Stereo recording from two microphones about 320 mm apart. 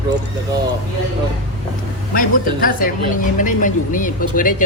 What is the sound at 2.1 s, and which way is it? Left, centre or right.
Speech, left.